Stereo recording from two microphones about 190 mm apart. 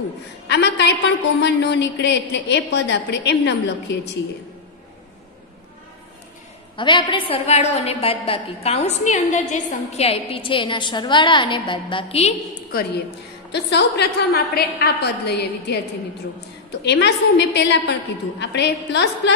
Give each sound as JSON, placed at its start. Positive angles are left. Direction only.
{"t": 0.5, "sound": "a woman's voice", "side_deg": 65}
{"t": 6.8, "sound": "a woman's voice", "side_deg": 25}
{"t": 13.5, "sound": "a woman's voice", "side_deg": 65}